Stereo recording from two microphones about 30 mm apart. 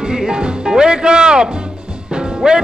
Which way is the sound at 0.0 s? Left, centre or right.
Right.